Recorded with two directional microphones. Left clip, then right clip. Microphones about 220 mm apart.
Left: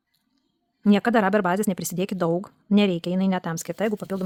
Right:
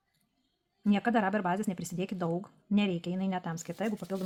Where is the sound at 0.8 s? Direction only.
50° left (ahead or behind).